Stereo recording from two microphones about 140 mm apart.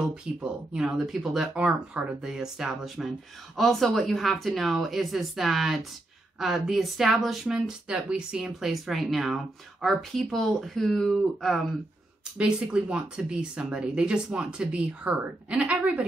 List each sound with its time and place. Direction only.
0.0 s speech: 5° right (ahead or behind)